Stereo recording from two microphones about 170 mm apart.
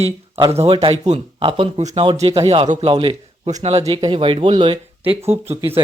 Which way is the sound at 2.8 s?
30° right (ahead or behind).